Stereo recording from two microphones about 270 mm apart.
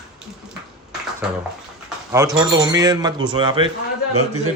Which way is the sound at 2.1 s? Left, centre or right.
Centre.